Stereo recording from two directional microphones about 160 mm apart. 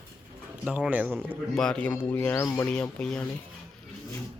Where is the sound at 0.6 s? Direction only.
5° right (ahead or behind).